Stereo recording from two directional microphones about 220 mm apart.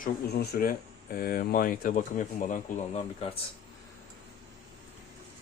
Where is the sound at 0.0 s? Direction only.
45° left (ahead or behind); by 3.3 s 30° left (ahead or behind).